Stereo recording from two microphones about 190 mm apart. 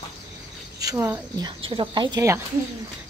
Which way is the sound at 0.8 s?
15° right (ahead or behind).